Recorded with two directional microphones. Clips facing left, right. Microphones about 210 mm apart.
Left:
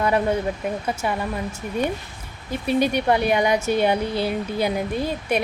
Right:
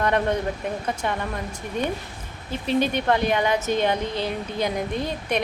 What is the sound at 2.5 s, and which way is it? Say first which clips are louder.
Speech: left 2 dB; 10° left (ahead or behind).